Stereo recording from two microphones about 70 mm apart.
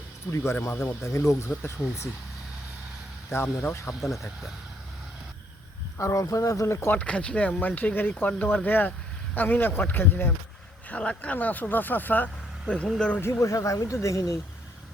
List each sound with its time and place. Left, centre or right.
0.3 s speech: left
3.2 s speech: left
3.8 s speech: centre
6.0 s speech: left
7.0 s speech: centre
10.8 s speech: centre
13.4 s speech: left